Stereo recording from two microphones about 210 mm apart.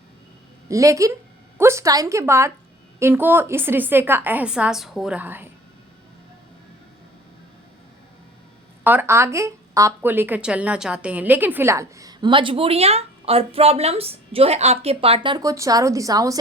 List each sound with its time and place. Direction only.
0.7 s speech: 15° right (ahead or behind)
8.8 s speech: 10° right (ahead or behind)